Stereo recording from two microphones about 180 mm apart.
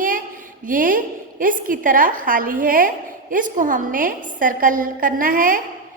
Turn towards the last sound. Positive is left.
turn(degrees=-50)  # may be behind; listen again after turning